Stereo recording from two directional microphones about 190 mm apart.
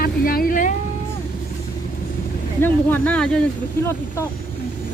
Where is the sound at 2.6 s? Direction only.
10° left (ahead or behind).